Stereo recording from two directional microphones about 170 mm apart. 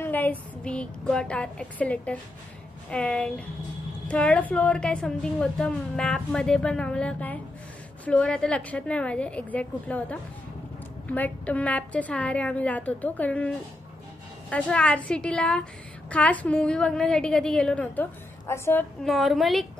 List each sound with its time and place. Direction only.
0.0 s a woman's voice: 10° left (ahead or behind)
14.5 s a woman's voice: 5° left (ahead or behind)
19.0 s a woman's voice: centre (ahead or behind)